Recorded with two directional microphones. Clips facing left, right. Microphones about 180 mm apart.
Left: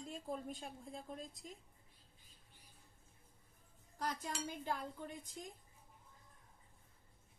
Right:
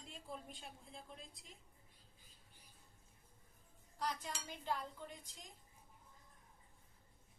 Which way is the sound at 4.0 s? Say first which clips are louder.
Left 1 dB; 45° left (ahead or behind).